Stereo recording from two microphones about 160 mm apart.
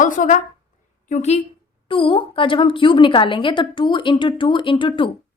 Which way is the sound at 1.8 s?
35° left (ahead or behind).